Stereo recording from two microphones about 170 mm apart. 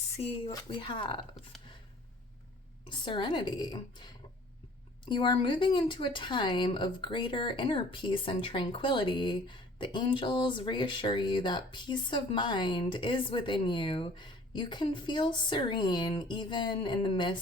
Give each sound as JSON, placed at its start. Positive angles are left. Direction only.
{"t": 0.4, "sound": "speech", "side_deg": 30}
{"t": 2.8, "sound": "speech", "side_deg": 30}